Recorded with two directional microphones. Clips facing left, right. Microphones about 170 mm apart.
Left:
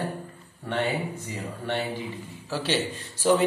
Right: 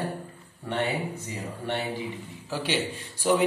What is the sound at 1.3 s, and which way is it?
A man's voice, 15° right (ahead or behind).